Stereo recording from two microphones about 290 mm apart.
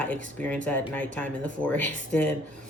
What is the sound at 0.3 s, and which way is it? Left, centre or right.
Speech, centre.